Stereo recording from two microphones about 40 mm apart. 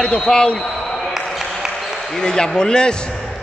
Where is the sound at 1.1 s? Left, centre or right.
Centre.